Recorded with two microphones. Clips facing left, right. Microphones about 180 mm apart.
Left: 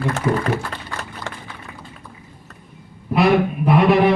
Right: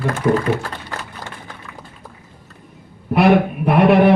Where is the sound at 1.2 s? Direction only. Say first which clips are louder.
Left 2 dB; 45° right (ahead or behind).